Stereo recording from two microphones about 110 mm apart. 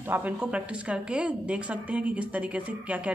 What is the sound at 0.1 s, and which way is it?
A woman's voice, 10° right (ahead or behind).